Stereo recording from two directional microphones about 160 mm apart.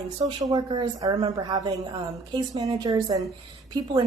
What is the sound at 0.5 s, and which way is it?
A woman's voice, 25° right (ahead or behind).